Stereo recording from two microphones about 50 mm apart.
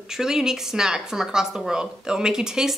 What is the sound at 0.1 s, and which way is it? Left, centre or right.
Speech, centre.